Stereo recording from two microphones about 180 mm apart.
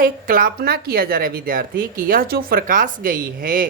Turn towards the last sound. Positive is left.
turn(degrees=-50)  # may be behind; listen again after turning